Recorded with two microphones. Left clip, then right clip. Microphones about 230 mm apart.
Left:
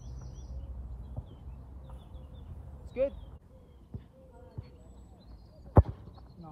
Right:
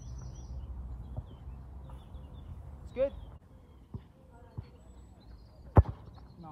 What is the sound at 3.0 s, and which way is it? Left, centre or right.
Speech, centre.